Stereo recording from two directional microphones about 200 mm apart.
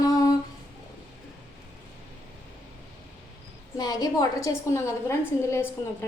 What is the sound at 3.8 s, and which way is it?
A woman's voice, 20° left (ahead or behind).